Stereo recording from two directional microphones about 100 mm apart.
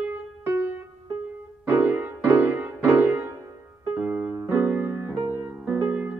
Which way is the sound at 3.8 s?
15° right (ahead or behind).